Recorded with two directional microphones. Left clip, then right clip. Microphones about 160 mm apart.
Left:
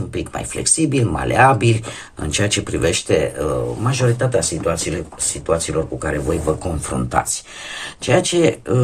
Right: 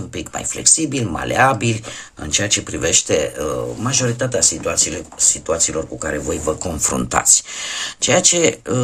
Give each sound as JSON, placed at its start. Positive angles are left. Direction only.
{"t": 0.1, "sound": "speech", "side_deg": -15}
{"t": 6.7, "sound": "speech", "side_deg": -40}